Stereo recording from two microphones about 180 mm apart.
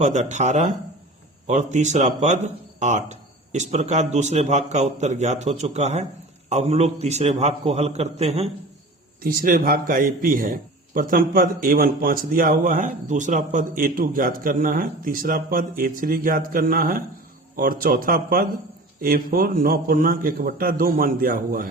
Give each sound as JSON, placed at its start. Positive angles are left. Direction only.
{"t": 0.0, "sound": "speech", "side_deg": -40}
{"t": 9.2, "sound": "a man's voice", "side_deg": -55}